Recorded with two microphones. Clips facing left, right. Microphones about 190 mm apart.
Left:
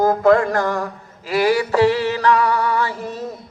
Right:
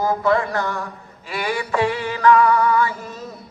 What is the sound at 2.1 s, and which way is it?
Music, 35° left (ahead or behind).